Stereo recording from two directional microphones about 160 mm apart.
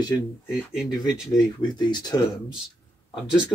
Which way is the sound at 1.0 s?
25° left (ahead or behind).